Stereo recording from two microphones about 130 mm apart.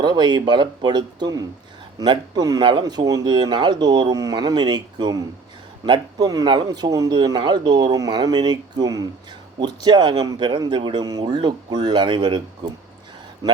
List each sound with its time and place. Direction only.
0.0 s a man's voice: 35° right (ahead or behind)